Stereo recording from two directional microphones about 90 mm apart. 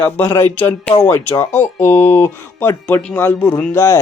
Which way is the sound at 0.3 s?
25° left (ahead or behind).